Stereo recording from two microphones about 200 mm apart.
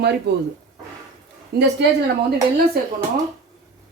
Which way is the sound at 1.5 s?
55° right (ahead or behind).